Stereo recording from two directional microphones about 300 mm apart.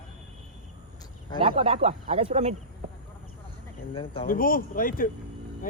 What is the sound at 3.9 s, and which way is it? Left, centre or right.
Speech, centre.